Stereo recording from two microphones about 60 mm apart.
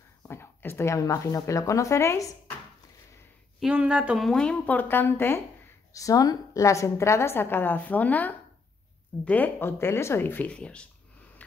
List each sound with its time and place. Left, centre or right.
0.3 s a sound: left
0.9 s a woman's voice: left
3.9 s speech: centre
4.2 s speech: centre
4.6 s a woman's voice: left
5.9 s a woman's voice: left
9.6 s a woman's voice: left
10.2 s a woman's voice: left
10.5 s speech: centre